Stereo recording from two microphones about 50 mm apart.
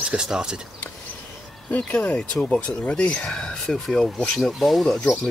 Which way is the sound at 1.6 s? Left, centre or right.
Left.